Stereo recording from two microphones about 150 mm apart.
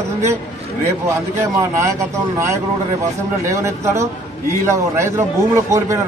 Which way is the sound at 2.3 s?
20° right (ahead or behind).